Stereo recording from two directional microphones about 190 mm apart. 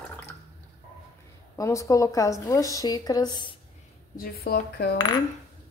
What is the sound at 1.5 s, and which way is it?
Speech, 15° left (ahead or behind).